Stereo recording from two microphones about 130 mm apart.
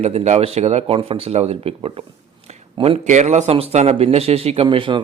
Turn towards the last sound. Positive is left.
turn(degrees=-40)  # may be behind; listen again after turning